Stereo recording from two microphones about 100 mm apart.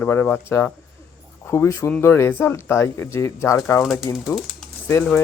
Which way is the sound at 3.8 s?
5° right (ahead or behind).